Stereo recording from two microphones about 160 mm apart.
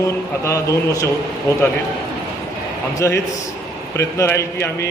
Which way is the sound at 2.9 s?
20° left (ahead or behind).